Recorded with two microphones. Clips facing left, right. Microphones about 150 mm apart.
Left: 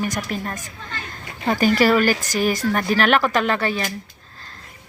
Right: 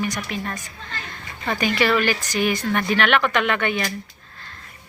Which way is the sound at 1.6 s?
40° left (ahead or behind).